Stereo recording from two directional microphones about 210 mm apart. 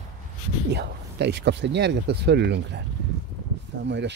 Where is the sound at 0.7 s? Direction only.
55° right (ahead or behind).